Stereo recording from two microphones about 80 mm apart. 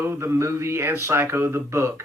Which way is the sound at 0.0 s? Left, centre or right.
Right.